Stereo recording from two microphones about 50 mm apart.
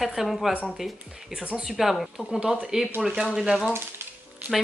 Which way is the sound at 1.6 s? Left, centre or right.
Centre.